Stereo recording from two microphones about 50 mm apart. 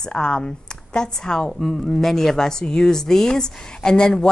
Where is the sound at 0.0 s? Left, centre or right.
Centre.